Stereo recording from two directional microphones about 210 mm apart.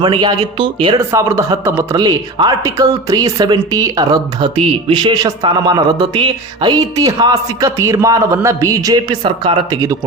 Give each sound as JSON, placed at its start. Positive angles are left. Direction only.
{"t": 0.0, "sound": "speech", "side_deg": -20}